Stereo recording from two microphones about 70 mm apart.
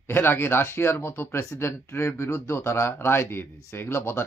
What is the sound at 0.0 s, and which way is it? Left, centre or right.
Speech, left.